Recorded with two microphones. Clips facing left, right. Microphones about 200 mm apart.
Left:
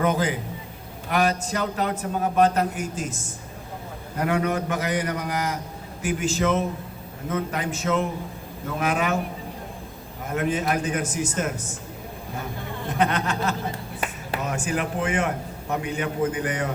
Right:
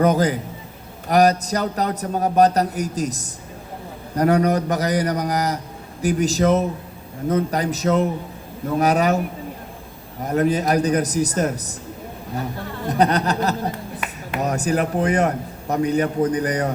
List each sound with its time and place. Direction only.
0.0 s a man's voice: 40° right (ahead or behind)
10.2 s a man's voice: 40° right (ahead or behind)
12.9 s a man's voice: 40° right (ahead or behind)